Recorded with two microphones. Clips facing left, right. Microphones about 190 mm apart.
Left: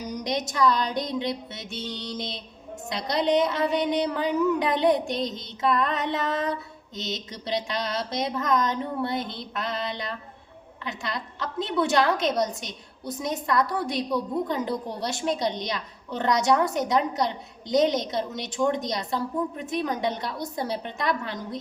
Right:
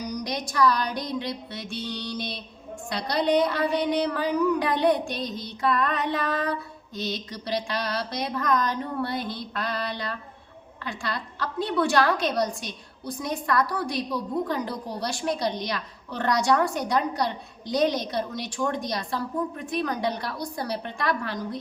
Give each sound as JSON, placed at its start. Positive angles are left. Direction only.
{"t": 0.0, "sound": "a woman's voice", "side_deg": 20}